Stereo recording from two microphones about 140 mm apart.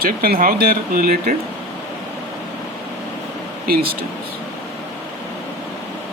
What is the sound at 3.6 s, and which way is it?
Speech, 90° right.